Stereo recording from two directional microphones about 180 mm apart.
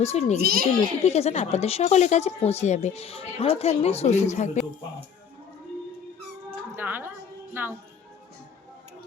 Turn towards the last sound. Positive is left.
turn(degrees=-10)  # may be behind; listen again after turning